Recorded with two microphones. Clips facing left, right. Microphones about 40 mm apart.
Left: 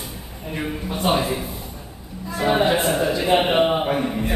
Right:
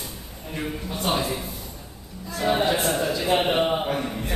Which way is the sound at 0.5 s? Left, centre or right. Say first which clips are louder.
Left 3 dB; centre.